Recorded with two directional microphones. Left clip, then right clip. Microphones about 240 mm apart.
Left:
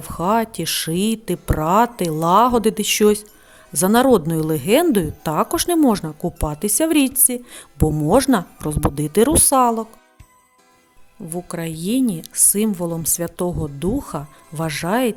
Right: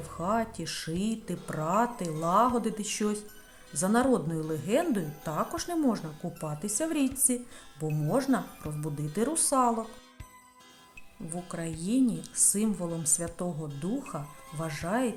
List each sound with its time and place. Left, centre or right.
0.0 s speech: left
11.3 s speech: left